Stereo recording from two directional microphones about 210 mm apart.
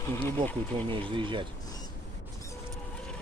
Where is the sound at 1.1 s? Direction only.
25° right (ahead or behind).